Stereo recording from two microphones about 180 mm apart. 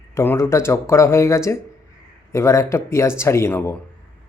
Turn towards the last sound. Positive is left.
turn(degrees=15)  # may be behind; listen again after turning